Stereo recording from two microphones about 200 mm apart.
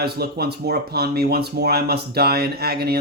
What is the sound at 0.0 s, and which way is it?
Speech, 55° right (ahead or behind).